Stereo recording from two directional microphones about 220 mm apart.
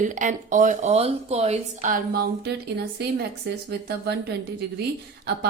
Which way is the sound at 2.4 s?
50° right (ahead or behind).